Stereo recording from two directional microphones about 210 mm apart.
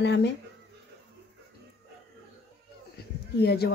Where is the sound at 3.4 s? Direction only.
50° left (ahead or behind).